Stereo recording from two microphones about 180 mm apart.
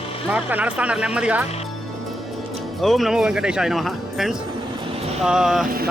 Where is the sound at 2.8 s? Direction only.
Centre (ahead or behind).